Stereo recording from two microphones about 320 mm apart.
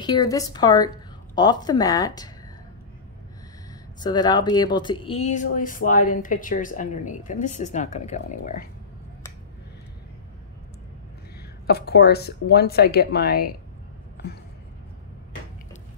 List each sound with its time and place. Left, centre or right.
0.0 s a woman's voice: centre
4.0 s speech: centre
11.6 s speech: left